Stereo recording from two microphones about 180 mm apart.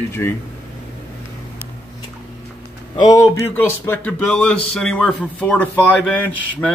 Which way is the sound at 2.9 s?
20° left (ahead or behind).